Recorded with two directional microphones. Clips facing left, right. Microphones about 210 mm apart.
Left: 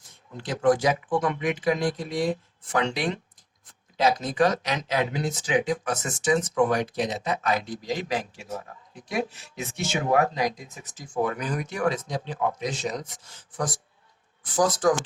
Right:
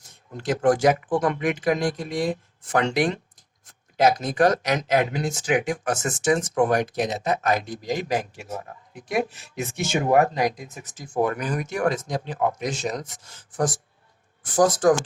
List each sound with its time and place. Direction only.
0.3 s speech: 45° right (ahead or behind)
14.4 s speech: 50° right (ahead or behind)